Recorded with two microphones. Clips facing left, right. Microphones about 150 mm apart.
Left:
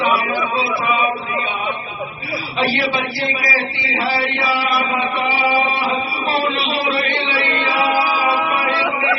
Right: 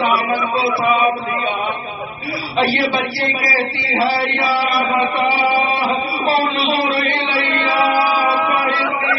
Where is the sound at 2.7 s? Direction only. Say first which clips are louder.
Right 2 dB; 35° right (ahead or behind).